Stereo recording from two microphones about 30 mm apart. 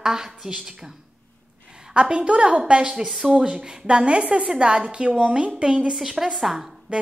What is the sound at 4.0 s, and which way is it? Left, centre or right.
A woman's voice, right.